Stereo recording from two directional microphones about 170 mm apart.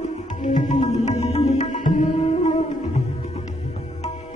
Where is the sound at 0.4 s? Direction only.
45° left (ahead or behind).